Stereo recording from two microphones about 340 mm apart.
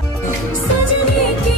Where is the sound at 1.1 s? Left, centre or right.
Left.